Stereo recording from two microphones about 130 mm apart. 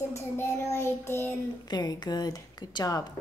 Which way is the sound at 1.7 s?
30° left (ahead or behind).